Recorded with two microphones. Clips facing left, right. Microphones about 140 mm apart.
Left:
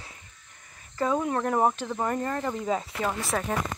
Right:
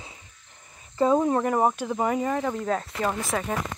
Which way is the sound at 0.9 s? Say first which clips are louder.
Right 5 dB; 30° right (ahead or behind).